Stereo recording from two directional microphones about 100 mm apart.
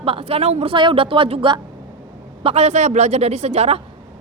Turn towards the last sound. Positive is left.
turn(degrees=-90)